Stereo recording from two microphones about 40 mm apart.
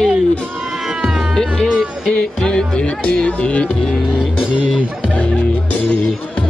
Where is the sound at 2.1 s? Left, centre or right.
Centre.